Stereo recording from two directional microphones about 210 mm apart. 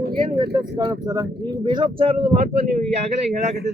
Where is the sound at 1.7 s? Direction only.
20° right (ahead or behind).